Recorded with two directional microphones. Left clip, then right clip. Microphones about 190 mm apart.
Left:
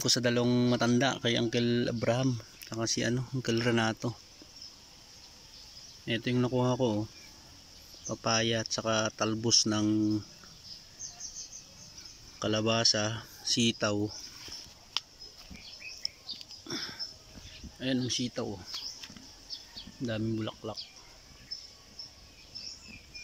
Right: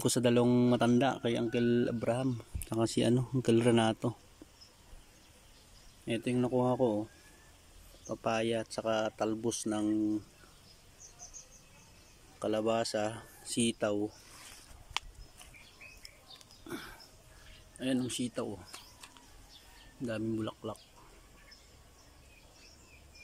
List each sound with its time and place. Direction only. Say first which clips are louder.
0.0 s speech: even; 15° right (ahead or behind)
2.6 s speech: right 1 dB; 15° right (ahead or behind)
6.0 s speech: left 2 dB; 5° right (ahead or behind)
8.1 s speech: left 3 dB; 5° right (ahead or behind)
12.4 s speech: left 2 dB; centre (ahead or behind)
17.7 s speech: left 3 dB; 5° right (ahead or behind)
20.1 s speech: left 1 dB; centre (ahead or behind)